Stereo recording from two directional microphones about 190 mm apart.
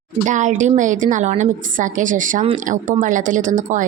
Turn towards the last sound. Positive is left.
turn(degrees=-40)  # may be behind; listen again after turning